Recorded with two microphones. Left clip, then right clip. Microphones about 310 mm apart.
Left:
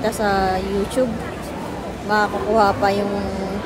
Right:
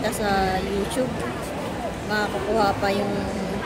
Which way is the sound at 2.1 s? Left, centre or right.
Centre.